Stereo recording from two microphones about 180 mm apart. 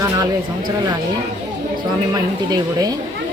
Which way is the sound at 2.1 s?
20° right (ahead or behind).